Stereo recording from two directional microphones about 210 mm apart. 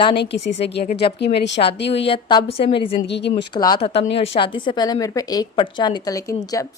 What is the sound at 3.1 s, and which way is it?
Speech, 55° left (ahead or behind).